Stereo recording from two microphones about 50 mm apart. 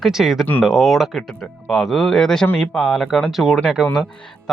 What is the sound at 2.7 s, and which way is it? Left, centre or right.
Speech, centre.